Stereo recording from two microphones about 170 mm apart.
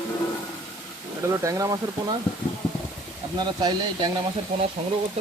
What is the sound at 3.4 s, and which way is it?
Speech, 25° right (ahead or behind).